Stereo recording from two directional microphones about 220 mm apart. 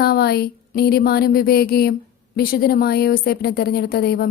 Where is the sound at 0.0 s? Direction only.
45° left (ahead or behind).